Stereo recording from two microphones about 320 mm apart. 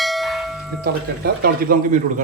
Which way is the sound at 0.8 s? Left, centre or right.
Right.